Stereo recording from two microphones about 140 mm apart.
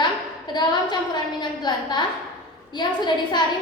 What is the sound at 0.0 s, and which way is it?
A woman's voice, 30° left (ahead or behind).